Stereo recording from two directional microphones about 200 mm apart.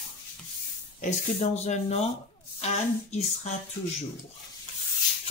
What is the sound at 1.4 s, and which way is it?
Speech, 35° left (ahead or behind).